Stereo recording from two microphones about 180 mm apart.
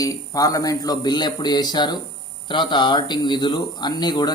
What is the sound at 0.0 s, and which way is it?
A man's voice, 20° left (ahead or behind).